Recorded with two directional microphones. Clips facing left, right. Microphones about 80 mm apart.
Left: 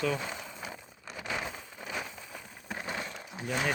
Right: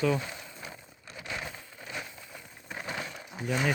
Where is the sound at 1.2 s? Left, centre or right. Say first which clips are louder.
Left 2 dB; centre.